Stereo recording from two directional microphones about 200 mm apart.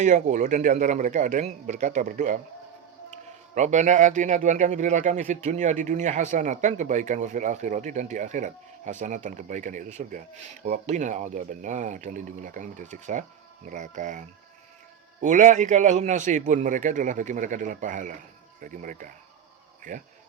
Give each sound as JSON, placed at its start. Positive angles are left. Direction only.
{"t": 0.0, "sound": "speech", "side_deg": -35}
{"t": 3.5, "sound": "speech", "side_deg": -35}